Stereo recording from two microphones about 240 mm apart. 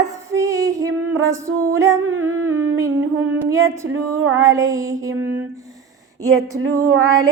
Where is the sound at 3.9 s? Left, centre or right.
Right.